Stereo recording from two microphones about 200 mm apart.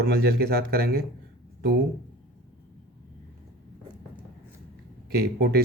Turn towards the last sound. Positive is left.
turn(degrees=-55)  # may be behind; listen again after turning